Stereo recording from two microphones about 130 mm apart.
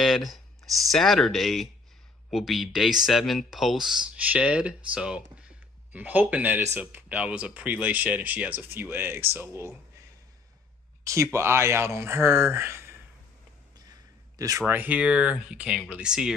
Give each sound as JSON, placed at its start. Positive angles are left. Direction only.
{"t": 0.0, "sound": "speech", "side_deg": 0}
{"t": 11.3, "sound": "speech", "side_deg": -20}
{"t": 14.7, "sound": "speech", "side_deg": -15}